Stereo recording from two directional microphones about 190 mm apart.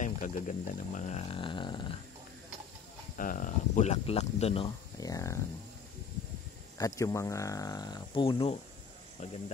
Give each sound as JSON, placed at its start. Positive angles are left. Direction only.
{"t": 0.0, "sound": "speech", "side_deg": 45}
{"t": 3.2, "sound": "speech", "side_deg": 45}
{"t": 4.9, "sound": "speech", "side_deg": 20}
{"t": 6.8, "sound": "speech", "side_deg": 15}